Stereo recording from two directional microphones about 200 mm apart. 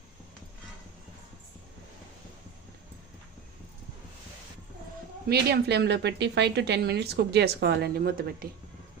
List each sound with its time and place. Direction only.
5.3 s a woman's voice: 55° right (ahead or behind)